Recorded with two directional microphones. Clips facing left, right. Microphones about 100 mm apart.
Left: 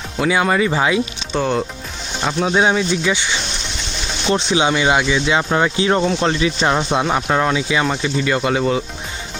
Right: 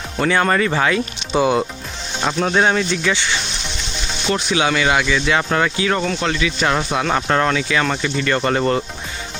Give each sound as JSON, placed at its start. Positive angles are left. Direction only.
{"t": 0.2, "sound": "speech", "side_deg": 10}
{"t": 1.3, "sound": "speech", "side_deg": -5}
{"t": 2.2, "sound": "speech", "side_deg": 5}
{"t": 6.7, "sound": "speech", "side_deg": 15}